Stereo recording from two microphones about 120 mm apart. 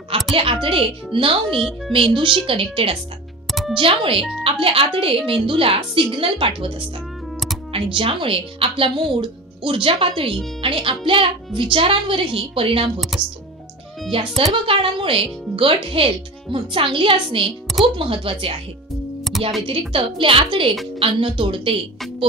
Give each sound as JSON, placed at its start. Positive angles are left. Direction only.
{"t": 0.4, "sound": "speech", "side_deg": -50}
{"t": 3.4, "sound": "music", "side_deg": 0}
{"t": 3.7, "sound": "speech", "side_deg": -45}
{"t": 7.7, "sound": "speech", "side_deg": -50}
{"t": 14.1, "sound": "speech", "side_deg": -50}
{"t": 19.9, "sound": "speech", "side_deg": -50}